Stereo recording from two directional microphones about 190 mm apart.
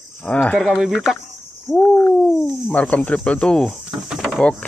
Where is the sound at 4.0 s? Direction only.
5° right (ahead or behind).